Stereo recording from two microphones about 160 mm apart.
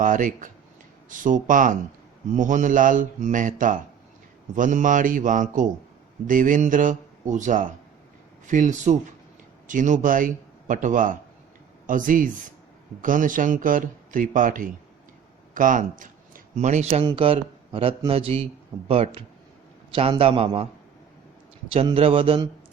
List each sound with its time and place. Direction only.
0.0 s a man's voice: 55° right (ahead or behind)
17.0 s speech: 30° right (ahead or behind)
21.7 s speech: 35° right (ahead or behind)